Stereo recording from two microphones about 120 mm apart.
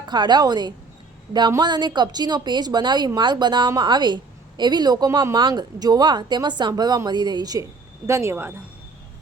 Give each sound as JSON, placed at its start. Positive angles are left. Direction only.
{"t": 0.0, "sound": "a woman's voice", "side_deg": -40}
{"t": 8.0, "sound": "speech", "side_deg": -25}